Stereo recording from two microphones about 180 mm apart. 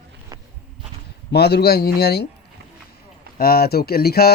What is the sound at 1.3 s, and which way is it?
Speech, 65° left (ahead or behind).